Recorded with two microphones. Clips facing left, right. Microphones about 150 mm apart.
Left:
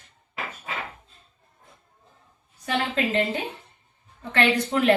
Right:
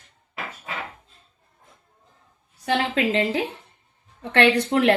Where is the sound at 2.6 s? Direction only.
90° right.